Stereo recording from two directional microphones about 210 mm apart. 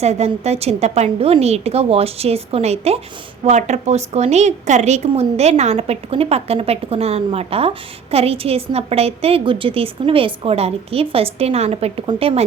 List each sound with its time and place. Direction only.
0.0 s a woman's voice: 30° right (ahead or behind)